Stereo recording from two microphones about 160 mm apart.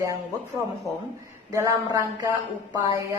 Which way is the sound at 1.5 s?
20° right (ahead or behind).